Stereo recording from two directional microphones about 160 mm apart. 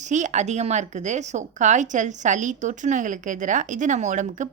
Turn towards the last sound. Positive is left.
turn(degrees=-50)  # may be behind; listen again after turning